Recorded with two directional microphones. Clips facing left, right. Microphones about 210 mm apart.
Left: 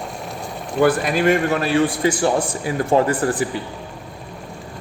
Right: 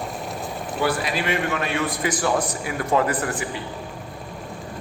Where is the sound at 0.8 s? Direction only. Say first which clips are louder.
Left 8 dB; 50° left (ahead or behind).